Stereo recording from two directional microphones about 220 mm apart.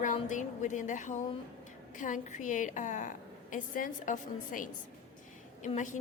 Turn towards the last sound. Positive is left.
turn(degrees=35)  # may be behind; listen again after turning